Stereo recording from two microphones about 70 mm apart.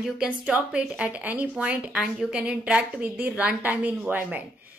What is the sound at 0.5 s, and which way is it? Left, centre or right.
A woman's voice, centre.